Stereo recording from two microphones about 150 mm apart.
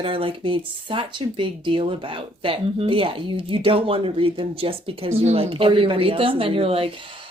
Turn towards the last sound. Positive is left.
turn(degrees=-40)  # may be behind; listen again after turning